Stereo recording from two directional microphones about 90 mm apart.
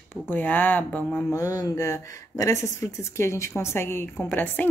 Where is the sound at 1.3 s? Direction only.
40° left (ahead or behind).